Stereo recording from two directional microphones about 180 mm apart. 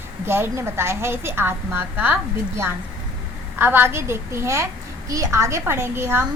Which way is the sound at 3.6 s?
10° right (ahead or behind).